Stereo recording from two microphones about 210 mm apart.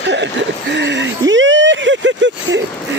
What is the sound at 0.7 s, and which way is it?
Speech, 55° right (ahead or behind).